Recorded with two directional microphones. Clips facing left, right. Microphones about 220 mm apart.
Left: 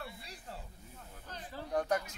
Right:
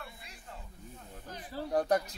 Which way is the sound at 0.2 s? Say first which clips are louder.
Left 2 dB; 35° left (ahead or behind).